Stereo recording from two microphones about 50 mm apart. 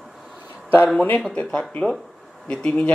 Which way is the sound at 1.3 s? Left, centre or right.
Left.